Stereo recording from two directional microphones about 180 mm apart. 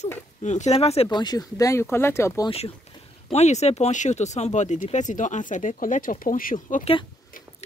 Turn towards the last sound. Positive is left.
turn(degrees=50)  # may be behind; listen again after turning